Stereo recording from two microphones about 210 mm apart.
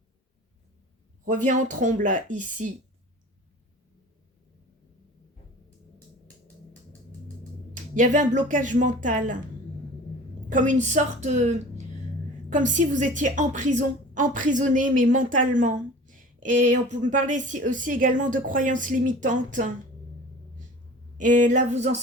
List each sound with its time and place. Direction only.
1.2 s a woman's voice: 35° right (ahead or behind)
7.7 s a woman's voice: 35° right (ahead or behind)
10.5 s a woman's voice: 35° right (ahead or behind)
21.2 s a woman's voice: 35° right (ahead or behind)